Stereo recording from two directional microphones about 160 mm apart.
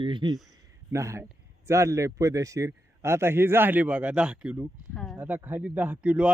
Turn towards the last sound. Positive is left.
turn(degrees=-10)  # may be behind; listen again after turning